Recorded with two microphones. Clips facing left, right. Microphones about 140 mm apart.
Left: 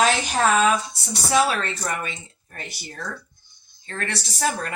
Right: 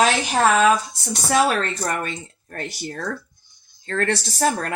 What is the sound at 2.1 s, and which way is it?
Speech, 50° right (ahead or behind).